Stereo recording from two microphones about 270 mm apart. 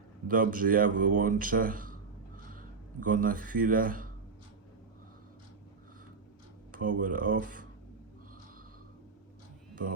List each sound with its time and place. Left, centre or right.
0.3 s speech: right
6.7 s speech: right